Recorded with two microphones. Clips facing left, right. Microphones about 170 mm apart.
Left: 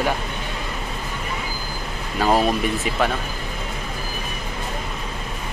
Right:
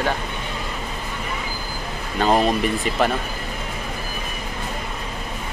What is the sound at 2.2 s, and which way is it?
Speech, 5° left (ahead or behind).